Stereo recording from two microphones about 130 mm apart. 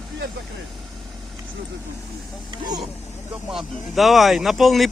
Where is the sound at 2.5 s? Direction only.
30° right (ahead or behind).